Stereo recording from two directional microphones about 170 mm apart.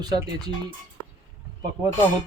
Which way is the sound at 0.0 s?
25° right (ahead or behind).